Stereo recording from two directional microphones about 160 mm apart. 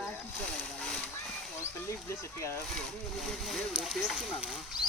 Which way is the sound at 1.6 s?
15° left (ahead or behind).